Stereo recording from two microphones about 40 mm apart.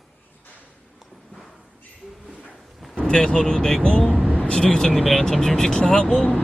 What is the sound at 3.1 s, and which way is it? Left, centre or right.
Speech, centre.